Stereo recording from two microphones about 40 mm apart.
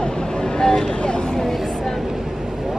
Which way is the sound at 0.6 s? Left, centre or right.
Centre.